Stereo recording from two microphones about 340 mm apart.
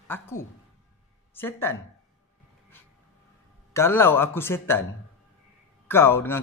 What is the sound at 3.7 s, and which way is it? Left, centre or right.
Speech, centre.